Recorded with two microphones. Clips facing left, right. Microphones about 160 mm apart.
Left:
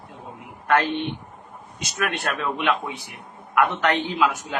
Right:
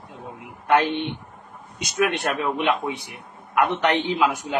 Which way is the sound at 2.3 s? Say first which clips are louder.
Right 1 dB; 25° right (ahead or behind).